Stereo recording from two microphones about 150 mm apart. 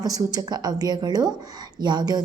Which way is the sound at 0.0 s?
25° right (ahead or behind).